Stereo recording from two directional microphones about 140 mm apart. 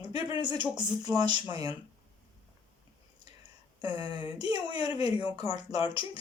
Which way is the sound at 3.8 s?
30° right (ahead or behind).